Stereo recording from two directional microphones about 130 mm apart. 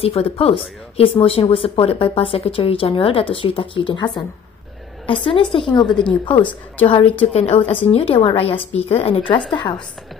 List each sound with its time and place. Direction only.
0.0 s a woman's voice: 50° left (ahead or behind)
5.9 s a woman's voice: 5° left (ahead or behind)
6.2 s a woman's voice: 40° left (ahead or behind)